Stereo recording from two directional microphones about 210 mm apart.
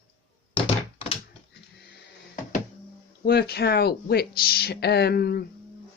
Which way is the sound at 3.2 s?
50° left (ahead or behind).